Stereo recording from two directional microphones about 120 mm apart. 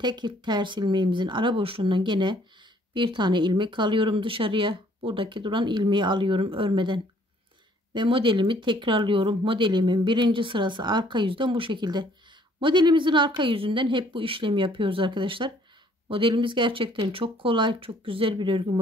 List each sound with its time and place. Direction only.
0.0 s speech: 40° right (ahead or behind)